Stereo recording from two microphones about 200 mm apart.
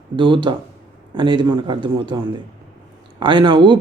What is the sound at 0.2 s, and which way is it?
Speech, 25° right (ahead or behind).